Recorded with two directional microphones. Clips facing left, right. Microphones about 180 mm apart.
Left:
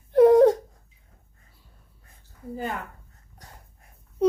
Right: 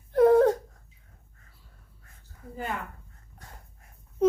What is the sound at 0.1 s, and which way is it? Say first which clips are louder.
Whimper: left 4 dB; 20° left (ahead or behind).